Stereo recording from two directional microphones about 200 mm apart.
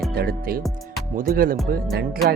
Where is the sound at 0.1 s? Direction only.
50° right (ahead or behind).